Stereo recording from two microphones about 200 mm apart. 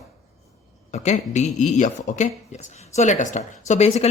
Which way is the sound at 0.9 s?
35° left (ahead or behind).